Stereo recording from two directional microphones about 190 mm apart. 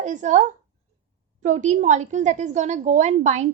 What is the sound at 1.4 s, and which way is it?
A woman's voice, 40° right (ahead or behind).